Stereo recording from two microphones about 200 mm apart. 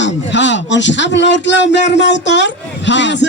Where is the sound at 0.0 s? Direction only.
65° left (ahead or behind).